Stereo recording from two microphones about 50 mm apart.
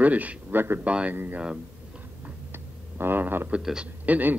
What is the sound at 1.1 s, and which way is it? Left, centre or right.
Speech, right.